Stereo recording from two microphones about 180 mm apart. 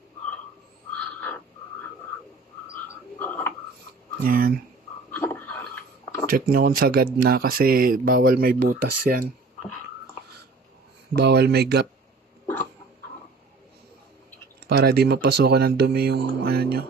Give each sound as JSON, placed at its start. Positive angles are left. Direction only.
{"t": 3.2, "sound": "frog", "side_deg": 15}
{"t": 4.2, "sound": "speech", "side_deg": -55}
{"t": 5.1, "sound": "a sound", "side_deg": 10}
{"t": 6.3, "sound": "speech", "side_deg": -55}
{"t": 11.1, "sound": "speech", "side_deg": -65}
{"t": 14.7, "sound": "speech", "side_deg": -60}